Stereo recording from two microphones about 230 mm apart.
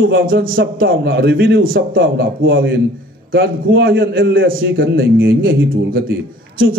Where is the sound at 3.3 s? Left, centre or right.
Right.